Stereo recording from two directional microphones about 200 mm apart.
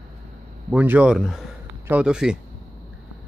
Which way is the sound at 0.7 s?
10° right (ahead or behind).